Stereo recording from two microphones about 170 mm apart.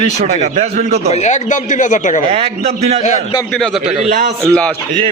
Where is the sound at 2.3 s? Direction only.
35° right (ahead or behind).